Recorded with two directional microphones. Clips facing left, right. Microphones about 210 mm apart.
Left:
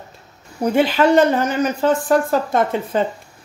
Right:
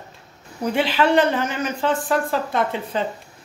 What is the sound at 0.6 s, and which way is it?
Speech, 45° left (ahead or behind).